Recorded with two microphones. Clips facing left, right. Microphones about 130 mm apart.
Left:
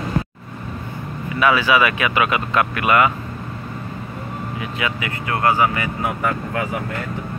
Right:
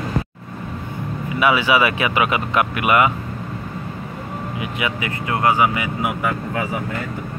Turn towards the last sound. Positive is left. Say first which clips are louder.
# even
turn(degrees=-10)  # may be behind; listen again after turning